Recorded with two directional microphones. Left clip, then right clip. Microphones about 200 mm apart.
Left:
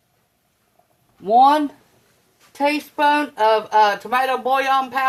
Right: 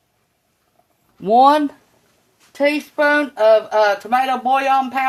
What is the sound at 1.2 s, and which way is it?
Speech, 60° right (ahead or behind).